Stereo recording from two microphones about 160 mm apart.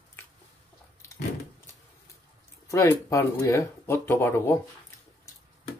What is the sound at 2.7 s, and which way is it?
Speech, 20° left (ahead or behind).